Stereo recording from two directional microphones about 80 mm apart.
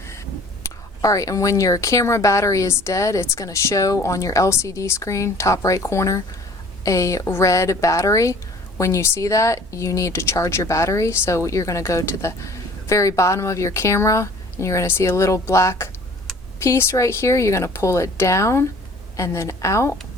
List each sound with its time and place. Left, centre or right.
1.0 s speech: left